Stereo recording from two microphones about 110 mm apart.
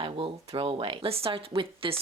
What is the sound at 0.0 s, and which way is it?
Speech, 55° right (ahead or behind).